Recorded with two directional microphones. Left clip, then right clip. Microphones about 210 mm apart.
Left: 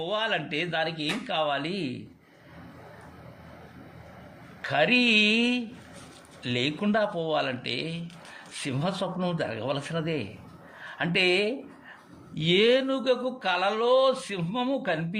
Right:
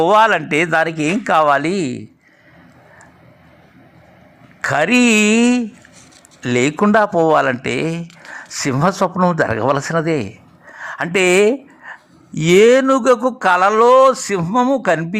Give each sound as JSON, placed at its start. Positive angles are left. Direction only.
{"t": 0.0, "sound": "speech", "side_deg": -35}
{"t": 4.6, "sound": "speech", "side_deg": -25}
{"t": 7.6, "sound": "speech", "side_deg": -90}
{"t": 9.2, "sound": "speech", "side_deg": -20}
{"t": 10.0, "sound": "speech", "side_deg": -30}
{"t": 10.8, "sound": "a sound", "side_deg": -30}
{"t": 12.4, "sound": "speech", "side_deg": -30}